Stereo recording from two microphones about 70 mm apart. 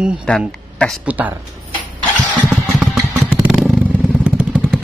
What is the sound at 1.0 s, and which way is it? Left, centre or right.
Speech, right.